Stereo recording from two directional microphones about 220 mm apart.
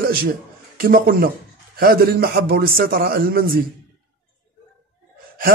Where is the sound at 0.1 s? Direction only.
40° right (ahead or behind).